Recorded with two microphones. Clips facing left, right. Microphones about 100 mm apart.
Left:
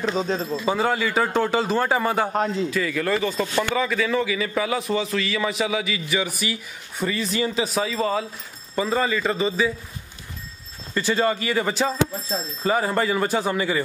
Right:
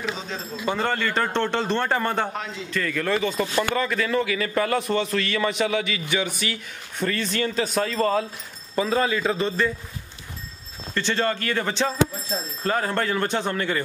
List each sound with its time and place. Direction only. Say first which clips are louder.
0.1 s speech: left 8 dB; 40° left (ahead or behind)
0.7 s a man's voice: left 1 dB; 5° left (ahead or behind)
2.3 s speech: left 9 dB; 40° left (ahead or behind)
2.7 s a man's voice: left 1 dB; 5° left (ahead or behind)
11.0 s a man's voice: left 3 dB; 5° left (ahead or behind)